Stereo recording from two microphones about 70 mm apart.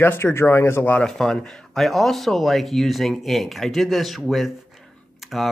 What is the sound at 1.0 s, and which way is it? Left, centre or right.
Speech, centre.